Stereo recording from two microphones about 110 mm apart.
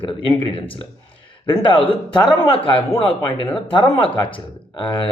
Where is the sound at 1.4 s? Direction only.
50° left (ahead or behind).